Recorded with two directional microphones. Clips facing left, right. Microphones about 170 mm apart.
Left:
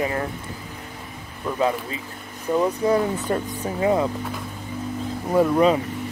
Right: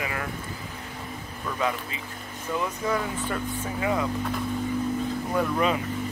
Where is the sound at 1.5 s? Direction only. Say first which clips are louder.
Left 6 dB; 30° left (ahead or behind).